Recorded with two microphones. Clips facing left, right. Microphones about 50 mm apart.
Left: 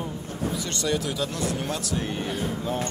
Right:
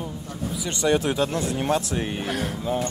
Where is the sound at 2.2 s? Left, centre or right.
Right.